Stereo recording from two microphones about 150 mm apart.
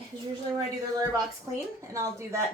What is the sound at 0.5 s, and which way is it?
Speech, 25° right (ahead or behind).